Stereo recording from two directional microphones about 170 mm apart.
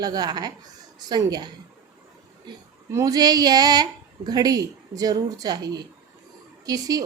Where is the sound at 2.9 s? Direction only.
20° right (ahead or behind).